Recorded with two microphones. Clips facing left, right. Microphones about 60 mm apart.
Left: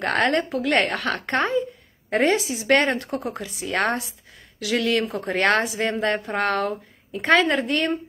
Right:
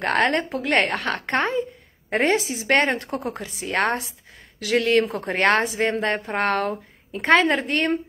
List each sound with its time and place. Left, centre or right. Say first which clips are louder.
0.0 s a woman's voice: even; right